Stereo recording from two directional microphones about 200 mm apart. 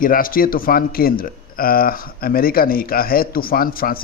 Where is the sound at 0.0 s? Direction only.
45° left (ahead or behind).